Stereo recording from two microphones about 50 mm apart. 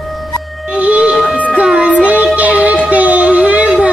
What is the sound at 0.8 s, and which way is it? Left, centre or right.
Music, right.